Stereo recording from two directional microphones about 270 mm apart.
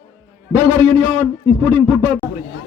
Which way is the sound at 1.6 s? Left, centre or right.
Centre.